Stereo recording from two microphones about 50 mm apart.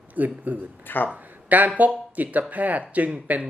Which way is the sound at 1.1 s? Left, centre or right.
Right.